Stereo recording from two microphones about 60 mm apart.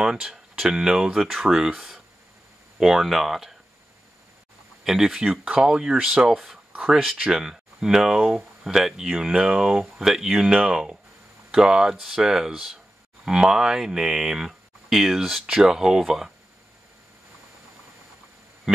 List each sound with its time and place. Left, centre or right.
0.0 s speech: centre
4.8 s speech: centre
6.7 s a sound: centre
7.2 s speech: centre